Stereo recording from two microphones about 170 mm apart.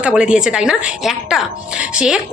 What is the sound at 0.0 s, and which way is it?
A woman's voice, 5° right (ahead or behind).